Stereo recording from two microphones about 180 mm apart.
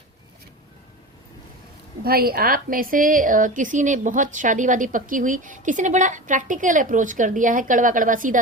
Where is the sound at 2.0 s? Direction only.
55° right (ahead or behind).